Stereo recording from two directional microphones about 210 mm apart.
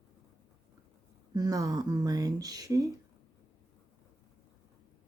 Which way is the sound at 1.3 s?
15° right (ahead or behind).